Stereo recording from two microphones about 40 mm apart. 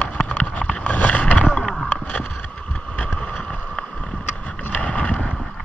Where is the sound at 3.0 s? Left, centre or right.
Left.